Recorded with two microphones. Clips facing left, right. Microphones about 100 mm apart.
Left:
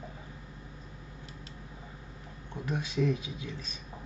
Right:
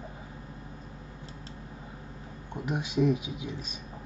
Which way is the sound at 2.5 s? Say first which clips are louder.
Right 3 dB; 15° right (ahead or behind).